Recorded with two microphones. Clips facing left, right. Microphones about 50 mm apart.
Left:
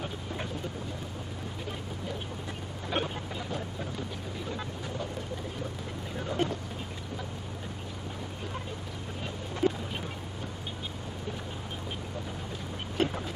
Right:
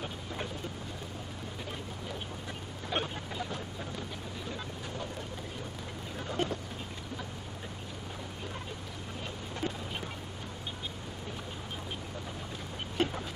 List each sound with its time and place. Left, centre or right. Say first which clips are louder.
2.9 s vehicle: left 2 dB; centre
6.3 s vehicle: left 2 dB; centre
9.6 s a sound: left 9 dB; centre
12.9 s vehicle: left 2 dB; centre